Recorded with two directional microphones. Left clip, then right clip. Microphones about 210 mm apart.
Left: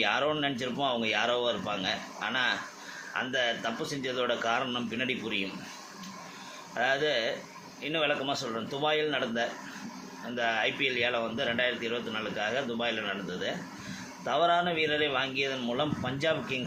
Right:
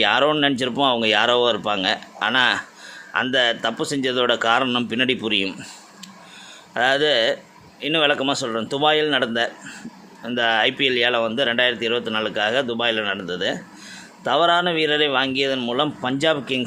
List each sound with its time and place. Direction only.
0.0 s speech: 55° right (ahead or behind)
6.7 s speech: 55° right (ahead or behind)